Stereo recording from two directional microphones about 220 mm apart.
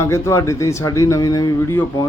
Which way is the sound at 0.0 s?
10° left (ahead or behind).